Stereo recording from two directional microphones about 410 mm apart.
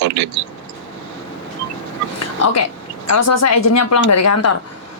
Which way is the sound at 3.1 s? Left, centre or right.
Left.